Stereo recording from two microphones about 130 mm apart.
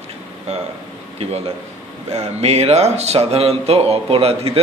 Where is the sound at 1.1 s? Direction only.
50° right (ahead or behind).